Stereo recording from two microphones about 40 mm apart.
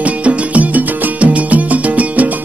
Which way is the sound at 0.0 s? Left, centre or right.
Right.